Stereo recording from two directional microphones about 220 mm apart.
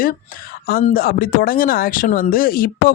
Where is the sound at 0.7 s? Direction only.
40° left (ahead or behind).